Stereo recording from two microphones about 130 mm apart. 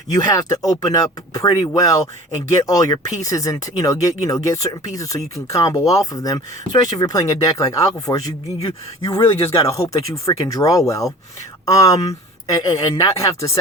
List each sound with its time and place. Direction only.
0.1 s speech: 30° left (ahead or behind)
12.7 s speech: 35° left (ahead or behind)
13.1 s speech: 25° left (ahead or behind)